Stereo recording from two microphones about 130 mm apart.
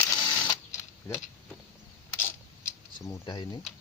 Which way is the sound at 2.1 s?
15° left (ahead or behind).